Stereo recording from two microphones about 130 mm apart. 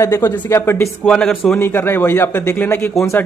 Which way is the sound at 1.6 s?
15° left (ahead or behind).